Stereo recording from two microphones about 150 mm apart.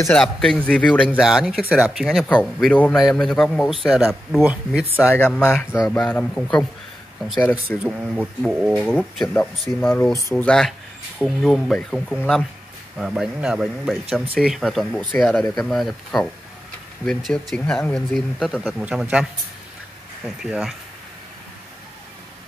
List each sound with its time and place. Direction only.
0.1 s speech: 5° left (ahead or behind)
1.1 s speech: 5° right (ahead or behind)
4.9 s speech: 15° left (ahead or behind)
6.0 s speech: 5° left (ahead or behind)
7.8 s speech: 10° right (ahead or behind)
20.2 s speech: 5° right (ahead or behind)